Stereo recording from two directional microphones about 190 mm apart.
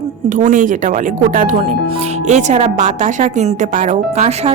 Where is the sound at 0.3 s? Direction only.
40° right (ahead or behind).